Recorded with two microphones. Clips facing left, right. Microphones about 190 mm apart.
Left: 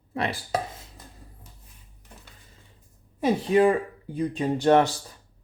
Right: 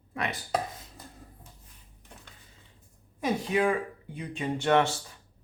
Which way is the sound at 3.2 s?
35° left (ahead or behind).